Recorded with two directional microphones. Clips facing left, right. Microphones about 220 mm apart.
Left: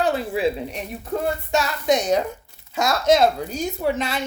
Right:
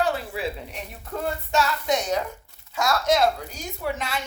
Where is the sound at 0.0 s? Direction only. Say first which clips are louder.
Left 5 dB; 20° left (ahead or behind).